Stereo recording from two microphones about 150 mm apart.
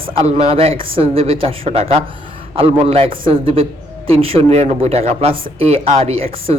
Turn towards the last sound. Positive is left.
turn(degrees=-40)  # may be behind; listen again after turning